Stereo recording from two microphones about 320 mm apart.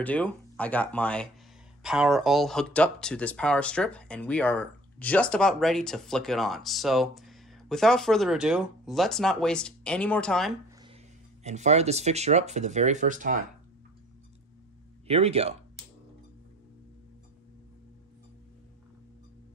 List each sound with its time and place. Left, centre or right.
0.0 s speech: centre
11.4 s speech: right
15.0 s speech: centre